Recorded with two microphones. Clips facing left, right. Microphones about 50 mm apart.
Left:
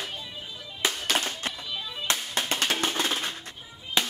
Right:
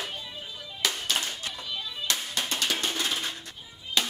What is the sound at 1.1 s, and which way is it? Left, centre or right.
Music, left.